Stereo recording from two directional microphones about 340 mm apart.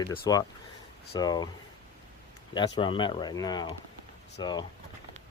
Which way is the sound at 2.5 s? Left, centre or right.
Centre.